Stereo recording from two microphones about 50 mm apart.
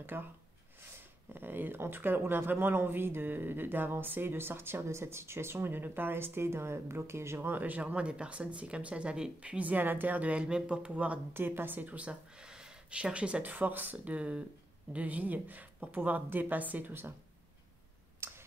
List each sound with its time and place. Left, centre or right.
0.0 s speech: right
7.4 s speech: right
7.8 s speech: right
11.3 s speech: right
13.4 s speech: right
18.2 s clicking: right